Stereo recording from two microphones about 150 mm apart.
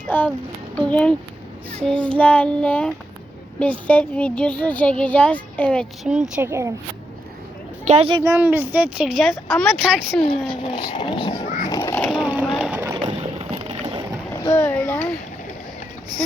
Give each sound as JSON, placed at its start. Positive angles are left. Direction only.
{"t": 0.1, "sound": "a child's voice", "side_deg": 10}
{"t": 6.1, "sound": "speech", "side_deg": -5}
{"t": 6.4, "sound": "speech", "side_deg": -20}
{"t": 7.9, "sound": "speech", "side_deg": -45}
{"t": 8.2, "sound": "speech", "side_deg": -15}
{"t": 10.6, "sound": "speech", "side_deg": 35}
{"t": 11.4, "sound": "a child's voice", "side_deg": 55}
{"t": 12.0, "sound": "speech", "side_deg": 0}
{"t": 12.3, "sound": "vehicle", "side_deg": -5}
{"t": 13.1, "sound": "boat", "side_deg": -45}
{"t": 14.4, "sound": "speech", "side_deg": 25}
{"t": 14.7, "sound": "a sound", "side_deg": 10}